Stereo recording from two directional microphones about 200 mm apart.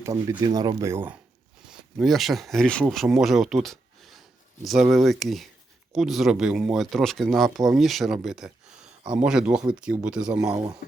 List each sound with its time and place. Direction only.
0.0 s speech: 15° right (ahead or behind)